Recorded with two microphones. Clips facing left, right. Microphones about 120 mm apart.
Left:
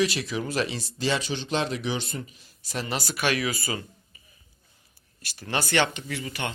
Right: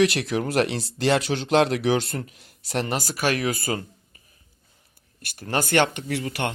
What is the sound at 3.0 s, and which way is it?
Speech, 40° right (ahead or behind).